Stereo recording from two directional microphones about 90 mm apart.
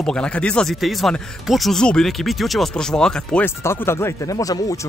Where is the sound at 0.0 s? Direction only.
10° left (ahead or behind).